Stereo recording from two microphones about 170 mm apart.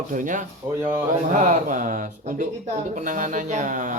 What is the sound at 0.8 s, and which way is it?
Speech, 10° right (ahead or behind).